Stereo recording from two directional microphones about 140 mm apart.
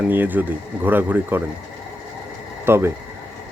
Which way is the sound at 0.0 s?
15° right (ahead or behind).